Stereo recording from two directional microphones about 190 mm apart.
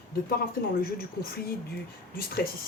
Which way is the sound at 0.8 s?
50° left (ahead or behind).